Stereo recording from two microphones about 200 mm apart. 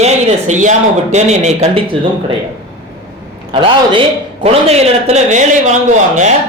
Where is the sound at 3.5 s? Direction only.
25° right (ahead or behind).